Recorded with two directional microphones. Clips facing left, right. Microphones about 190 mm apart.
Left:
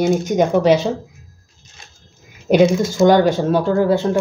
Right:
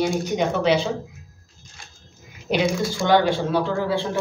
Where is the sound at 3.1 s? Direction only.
45° left (ahead or behind).